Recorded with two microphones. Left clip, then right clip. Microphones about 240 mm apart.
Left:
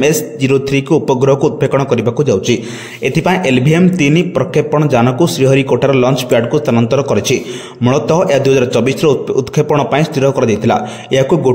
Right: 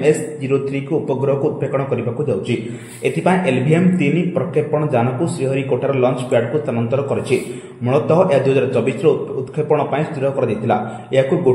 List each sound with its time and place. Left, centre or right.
0.0 s a man's voice: left